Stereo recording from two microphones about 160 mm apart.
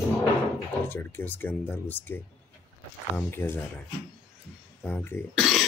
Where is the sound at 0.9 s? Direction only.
15° left (ahead or behind).